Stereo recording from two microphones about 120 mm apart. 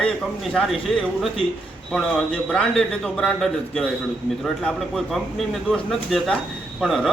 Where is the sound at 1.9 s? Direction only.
Centre (ahead or behind).